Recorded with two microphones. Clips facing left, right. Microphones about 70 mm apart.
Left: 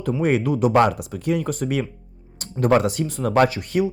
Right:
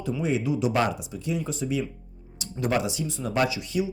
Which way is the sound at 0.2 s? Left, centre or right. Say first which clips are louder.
Left 6 dB; left.